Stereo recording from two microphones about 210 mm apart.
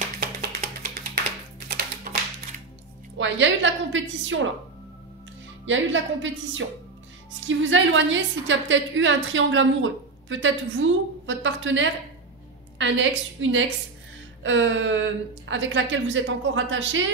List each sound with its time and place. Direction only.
1.7 s typewriter: 45° right (ahead or behind)
3.2 s a woman's voice: 60° right (ahead or behind)
5.7 s a woman's voice: 65° right (ahead or behind)